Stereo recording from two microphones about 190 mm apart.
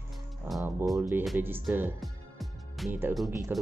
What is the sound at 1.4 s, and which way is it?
Speech, 10° right (ahead or behind).